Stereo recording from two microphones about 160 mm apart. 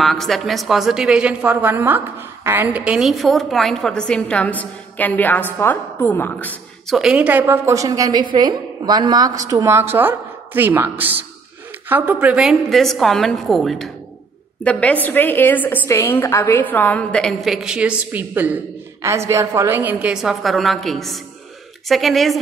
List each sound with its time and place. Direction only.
0.0 s a woman's voice: centre (ahead or behind)
6.9 s a woman's voice: 5° right (ahead or behind)